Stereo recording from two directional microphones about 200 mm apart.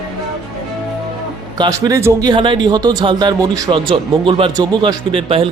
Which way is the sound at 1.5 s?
20° right (ahead or behind).